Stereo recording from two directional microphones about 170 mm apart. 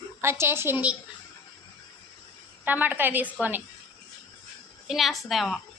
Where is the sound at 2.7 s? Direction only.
10° right (ahead or behind).